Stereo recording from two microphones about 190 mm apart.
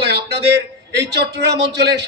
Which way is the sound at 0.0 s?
60° right (ahead or behind).